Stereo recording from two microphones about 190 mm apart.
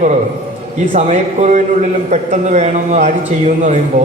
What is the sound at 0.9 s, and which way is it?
A man's voice, 35° right (ahead or behind).